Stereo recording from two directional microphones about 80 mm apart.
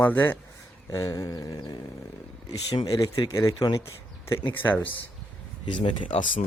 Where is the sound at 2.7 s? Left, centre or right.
Left.